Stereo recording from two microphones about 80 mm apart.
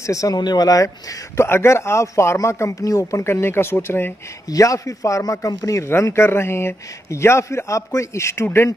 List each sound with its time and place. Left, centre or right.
0.0 s a man's voice: left
0.4 s speech: left
4.5 s a man's voice: left
5.5 s a man's voice: left
5.8 s speech: left